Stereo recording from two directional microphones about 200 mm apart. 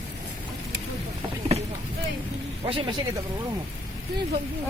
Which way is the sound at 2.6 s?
25° right (ahead or behind).